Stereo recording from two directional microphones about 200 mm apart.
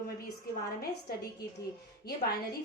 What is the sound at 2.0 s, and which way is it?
Speech, 50° left (ahead or behind).